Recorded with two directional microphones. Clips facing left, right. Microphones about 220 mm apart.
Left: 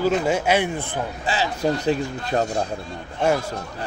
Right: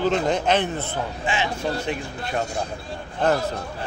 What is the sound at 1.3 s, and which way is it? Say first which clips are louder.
Speech: left 4 dB; 35° left (ahead or behind).